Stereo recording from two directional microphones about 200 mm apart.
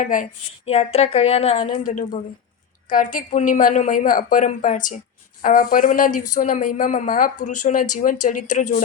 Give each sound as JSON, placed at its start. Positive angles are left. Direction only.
{"t": 0.0, "sound": "speech", "side_deg": 40}